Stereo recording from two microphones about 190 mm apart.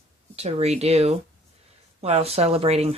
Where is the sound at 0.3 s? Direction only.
35° right (ahead or behind).